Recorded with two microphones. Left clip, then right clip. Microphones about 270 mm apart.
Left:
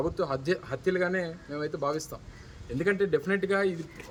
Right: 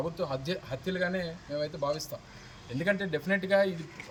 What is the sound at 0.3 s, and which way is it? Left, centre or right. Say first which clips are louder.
Speech: left 5 dB; centre.